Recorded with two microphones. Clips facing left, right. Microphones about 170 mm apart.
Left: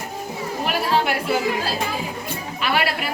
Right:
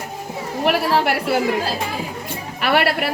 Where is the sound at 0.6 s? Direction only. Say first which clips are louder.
Right 4 dB; 70° right (ahead or behind).